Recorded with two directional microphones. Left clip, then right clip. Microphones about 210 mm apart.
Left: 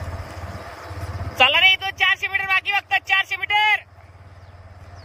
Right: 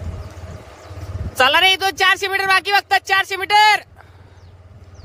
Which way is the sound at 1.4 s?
25° right (ahead or behind).